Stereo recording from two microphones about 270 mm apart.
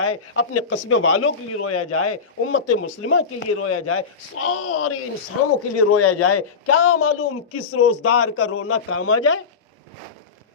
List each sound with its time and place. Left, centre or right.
0.0 s a man's voice: left